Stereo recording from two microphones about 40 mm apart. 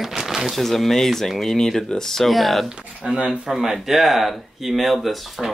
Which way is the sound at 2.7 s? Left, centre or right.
Right.